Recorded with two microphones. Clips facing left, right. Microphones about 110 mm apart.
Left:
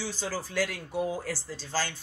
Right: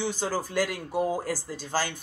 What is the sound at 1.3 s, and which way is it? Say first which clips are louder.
Speech: right 4 dB; 15° right (ahead or behind).